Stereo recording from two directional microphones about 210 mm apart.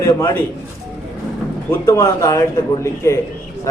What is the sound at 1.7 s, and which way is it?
Speech, 15° left (ahead or behind).